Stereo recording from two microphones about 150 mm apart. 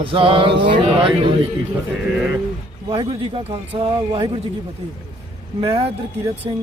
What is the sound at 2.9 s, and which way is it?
A man's voice, 35° right (ahead or behind).